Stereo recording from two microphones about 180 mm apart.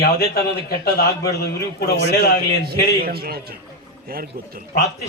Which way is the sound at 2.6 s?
60° right (ahead or behind).